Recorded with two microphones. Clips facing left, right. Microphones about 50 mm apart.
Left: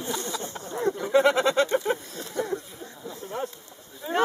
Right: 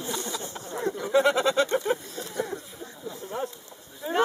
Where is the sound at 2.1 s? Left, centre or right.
Centre.